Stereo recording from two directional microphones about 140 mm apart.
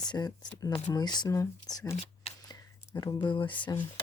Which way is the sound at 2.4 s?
25° left (ahead or behind).